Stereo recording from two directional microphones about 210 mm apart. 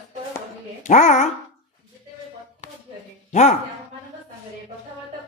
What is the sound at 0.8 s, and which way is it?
Speech, 35° left (ahead or behind).